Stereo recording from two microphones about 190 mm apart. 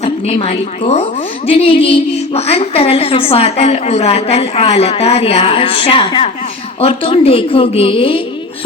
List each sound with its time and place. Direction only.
0.0 s a woman's voice: 30° left (ahead or behind)